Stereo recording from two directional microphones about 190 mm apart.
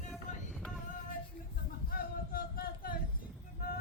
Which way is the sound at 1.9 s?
50° left (ahead or behind).